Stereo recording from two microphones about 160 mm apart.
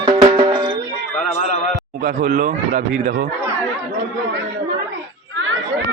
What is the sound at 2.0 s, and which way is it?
Speech, 60° right (ahead or behind).